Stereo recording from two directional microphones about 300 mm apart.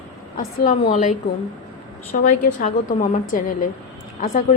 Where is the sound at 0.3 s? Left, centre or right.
Left.